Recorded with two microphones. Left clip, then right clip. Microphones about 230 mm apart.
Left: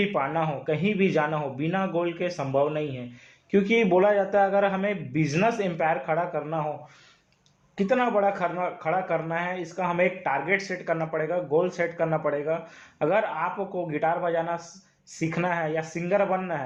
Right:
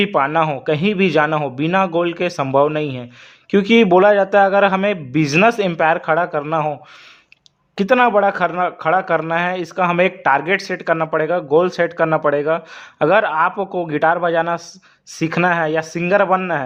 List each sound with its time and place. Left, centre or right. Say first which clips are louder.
0.0 s a man's voice: right 10 dB; right
7.8 s speech: right 10 dB; right